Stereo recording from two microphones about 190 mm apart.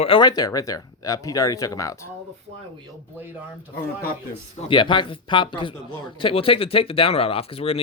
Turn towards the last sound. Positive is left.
turn(degrees=30)  # may be behind; listen again after turning